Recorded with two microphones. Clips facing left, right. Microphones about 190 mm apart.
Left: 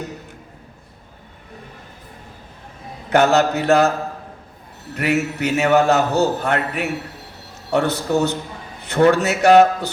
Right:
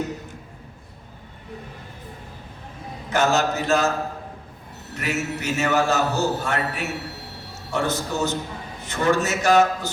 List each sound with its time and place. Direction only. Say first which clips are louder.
3.1 s a man's voice: left 6 dB; 65° left (ahead or behind)
4.9 s a man's voice: left 7 dB; 65° left (ahead or behind)